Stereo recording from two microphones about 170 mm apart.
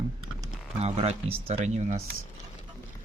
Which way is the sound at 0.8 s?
40° right (ahead or behind).